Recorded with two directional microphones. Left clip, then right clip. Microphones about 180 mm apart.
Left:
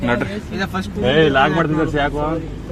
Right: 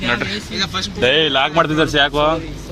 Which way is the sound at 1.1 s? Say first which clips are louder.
Left 2 dB; 30° right (ahead or behind).